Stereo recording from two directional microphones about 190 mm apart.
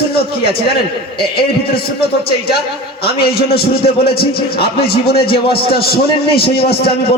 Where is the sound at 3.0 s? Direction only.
55° left (ahead or behind).